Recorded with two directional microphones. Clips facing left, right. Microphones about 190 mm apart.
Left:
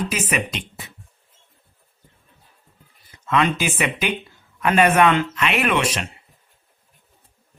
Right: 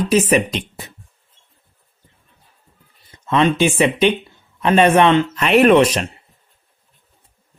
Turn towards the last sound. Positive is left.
turn(degrees=-35)  # may be behind; listen again after turning